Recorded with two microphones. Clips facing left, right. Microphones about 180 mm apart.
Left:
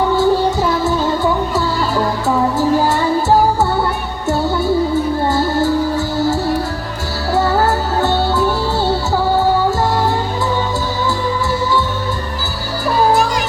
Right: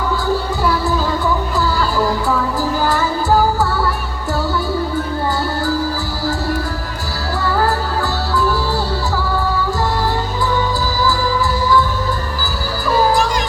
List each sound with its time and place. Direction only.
0.2 s music: 25° left (ahead or behind)
7.3 s music: 25° left (ahead or behind)